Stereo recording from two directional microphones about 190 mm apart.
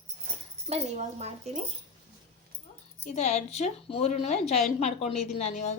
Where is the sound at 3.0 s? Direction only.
40° left (ahead or behind).